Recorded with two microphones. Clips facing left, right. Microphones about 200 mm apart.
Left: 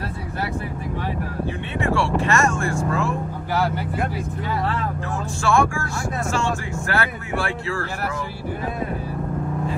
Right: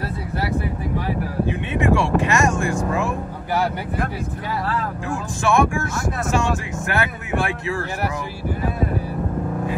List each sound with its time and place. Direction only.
1.4 s vehicle: 15° right (ahead or behind)
5.4 s speech: 20° right (ahead or behind)